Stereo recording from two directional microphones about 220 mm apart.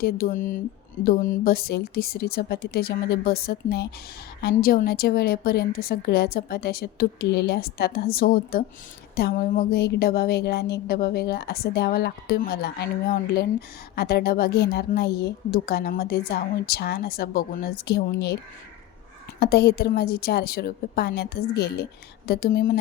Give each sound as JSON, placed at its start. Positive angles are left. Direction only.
{"t": 0.0, "sound": "speech", "side_deg": 40}
{"t": 1.5, "sound": "a woman's voice", "side_deg": 45}
{"t": 19.4, "sound": "a woman's voice", "side_deg": 45}